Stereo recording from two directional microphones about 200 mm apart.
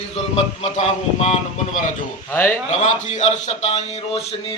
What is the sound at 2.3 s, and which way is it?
Speech, 10° left (ahead or behind).